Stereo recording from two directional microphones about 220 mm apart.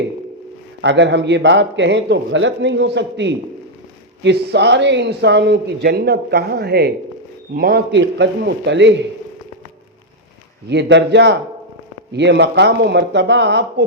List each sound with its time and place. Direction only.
0.8 s speech: 55° right (ahead or behind)
10.7 s speech: 50° right (ahead or behind)